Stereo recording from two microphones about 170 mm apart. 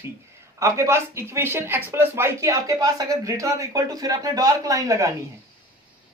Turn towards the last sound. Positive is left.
turn(degrees=-20)  # may be behind; listen again after turning